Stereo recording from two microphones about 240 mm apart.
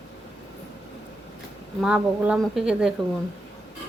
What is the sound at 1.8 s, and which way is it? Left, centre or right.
Speech, centre.